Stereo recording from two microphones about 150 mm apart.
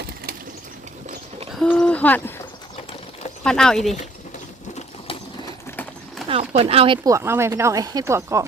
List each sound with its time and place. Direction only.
1.5 s a sound: 5° left (ahead or behind)
3.4 s speech: 5° left (ahead or behind)
6.2 s speech: 40° right (ahead or behind)
7.1 s speech: 15° right (ahead or behind)